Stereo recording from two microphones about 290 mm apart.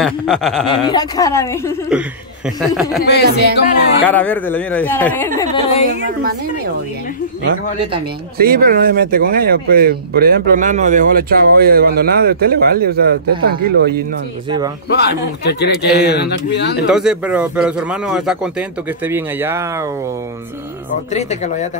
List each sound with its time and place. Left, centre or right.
0.0 s speech: centre
0.8 s speech: centre
1.9 s speech: centre
3.0 s speech: left
4.0 s speech: centre
5.4 s speech: centre
6.0 s speech: right
8.4 s speech: right
14.9 s speech: left
16.9 s speech: centre
21.1 s speech: left